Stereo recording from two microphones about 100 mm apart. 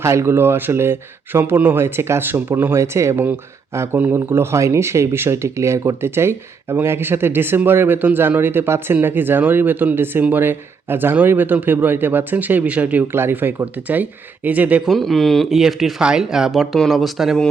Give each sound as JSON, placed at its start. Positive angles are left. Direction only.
{"t": 0.0, "sound": "speech", "side_deg": -30}
{"t": 14.8, "sound": "speech", "side_deg": 0}